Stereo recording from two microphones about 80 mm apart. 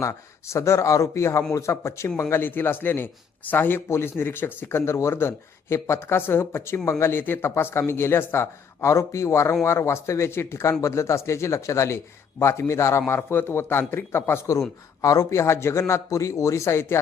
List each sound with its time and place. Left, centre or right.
0.0 s speech: left
2.3 s speech: left
15.0 s a man's voice: left
15.4 s speech: left